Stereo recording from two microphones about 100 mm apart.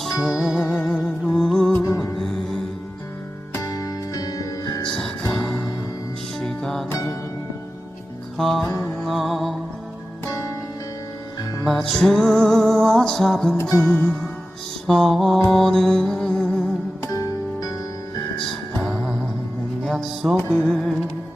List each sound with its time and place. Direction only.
0.0 s music: 5° right (ahead or behind)
0.7 s music: 5° left (ahead or behind)
1.7 s music: 30° left (ahead or behind)
3.5 s music: 35° left (ahead or behind)
6.4 s music: 5° left (ahead or behind)
6.9 s music: 30° left (ahead or behind)
8.4 s music: centre (ahead or behind)
10.3 s music: 35° left (ahead or behind)
11.7 s music: 5° left (ahead or behind)
14.8 s mantra: 5° left (ahead or behind)
15.4 s music: 5° left (ahead or behind)
17.0 s music: 35° left (ahead or behind)
19.8 s music: centre (ahead or behind)
20.5 s music: 20° right (ahead or behind)